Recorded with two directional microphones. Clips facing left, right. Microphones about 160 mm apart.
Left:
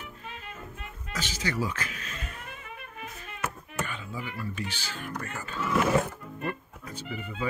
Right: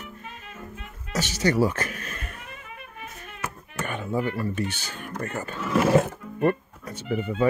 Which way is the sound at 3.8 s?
55° right (ahead or behind).